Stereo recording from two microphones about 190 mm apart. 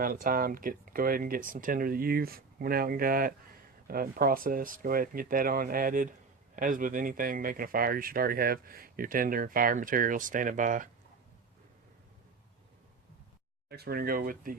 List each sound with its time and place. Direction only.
0.0 s speech: 50° right (ahead or behind)
13.7 s speech: 55° right (ahead or behind)